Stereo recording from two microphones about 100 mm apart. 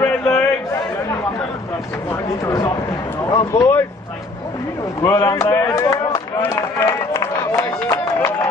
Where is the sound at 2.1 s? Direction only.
30° left (ahead or behind).